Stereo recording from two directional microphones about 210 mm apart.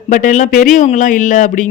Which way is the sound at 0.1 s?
35° left (ahead or behind).